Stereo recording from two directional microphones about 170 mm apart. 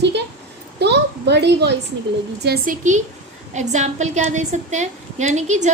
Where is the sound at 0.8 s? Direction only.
80° right.